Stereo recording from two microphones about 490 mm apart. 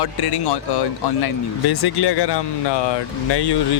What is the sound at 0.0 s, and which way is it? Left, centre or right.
Speech, left.